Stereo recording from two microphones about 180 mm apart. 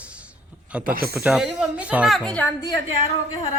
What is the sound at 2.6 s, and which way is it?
Speech, 20° left (ahead or behind).